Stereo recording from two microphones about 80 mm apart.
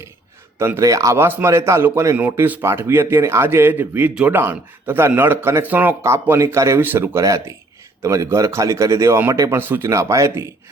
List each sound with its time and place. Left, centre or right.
0.6 s a man's voice: right
1.2 s a man's voice: right
6.0 s a man's voice: right
6.8 s a man's voice: right
7.2 s a man's voice: right
9.9 s a man's voice: right